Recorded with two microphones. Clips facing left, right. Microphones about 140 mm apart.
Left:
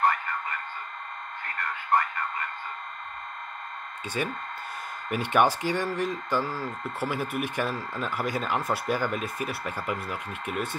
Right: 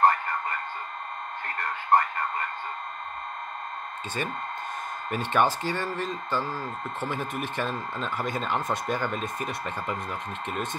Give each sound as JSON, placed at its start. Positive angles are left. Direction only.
{"t": 1.4, "sound": "speech", "side_deg": -35}
{"t": 4.2, "sound": "speech", "side_deg": 10}